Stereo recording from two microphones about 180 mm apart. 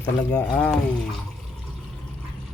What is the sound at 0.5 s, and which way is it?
Speech, 10° left (ahead or behind).